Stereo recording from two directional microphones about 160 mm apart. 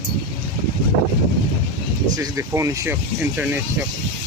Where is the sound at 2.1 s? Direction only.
20° right (ahead or behind).